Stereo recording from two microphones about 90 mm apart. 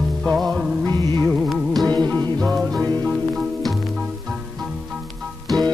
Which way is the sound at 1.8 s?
50° right (ahead or behind).